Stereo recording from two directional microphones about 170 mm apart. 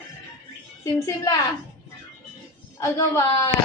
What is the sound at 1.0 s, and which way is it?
Speech, 20° left (ahead or behind).